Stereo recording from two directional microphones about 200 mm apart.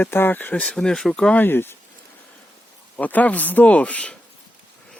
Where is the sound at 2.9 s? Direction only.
10° left (ahead or behind).